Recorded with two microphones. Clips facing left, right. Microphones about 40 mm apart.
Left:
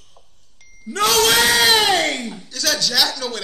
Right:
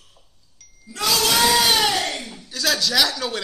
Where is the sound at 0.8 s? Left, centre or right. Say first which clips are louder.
Left 5 dB; left.